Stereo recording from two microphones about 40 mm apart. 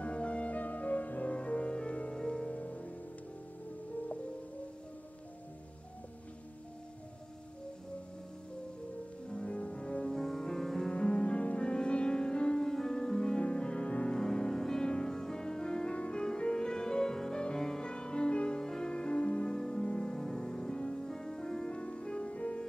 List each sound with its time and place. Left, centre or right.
0.0 s music: left
2.5 s music: left
9.3 s music: left
10.1 s music: centre
10.9 s music: left
14.2 s music: centre
18.6 s music: centre
20.2 s music: centre; by 22.7 s left